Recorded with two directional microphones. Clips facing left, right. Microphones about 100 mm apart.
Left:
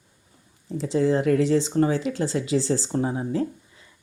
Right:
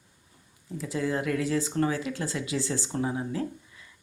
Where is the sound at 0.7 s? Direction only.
30° left (ahead or behind).